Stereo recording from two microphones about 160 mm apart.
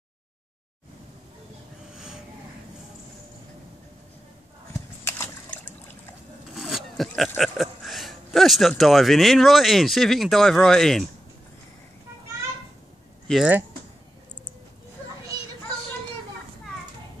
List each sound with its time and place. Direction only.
5.0 s a sound: 15° left (ahead or behind)
6.5 s speech: centre (ahead or behind)
13.3 s speech: 5° right (ahead or behind)